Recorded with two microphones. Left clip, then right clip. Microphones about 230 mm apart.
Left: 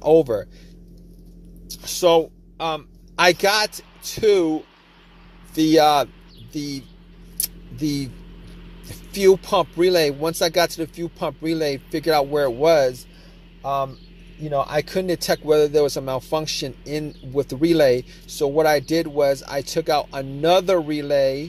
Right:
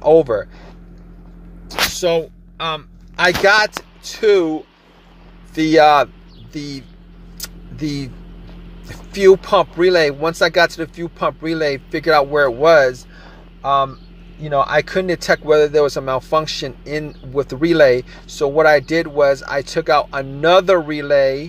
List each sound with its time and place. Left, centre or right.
0.0 s speech: left
1.7 s a sound: left
2.5 s throat clearing: centre
3.2 s speech: left
7.3 s a sound: left
8.8 s speech: left